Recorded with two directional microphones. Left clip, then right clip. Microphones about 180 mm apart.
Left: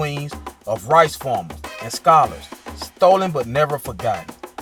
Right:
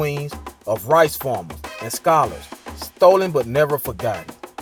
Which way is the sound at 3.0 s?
40° right (ahead or behind).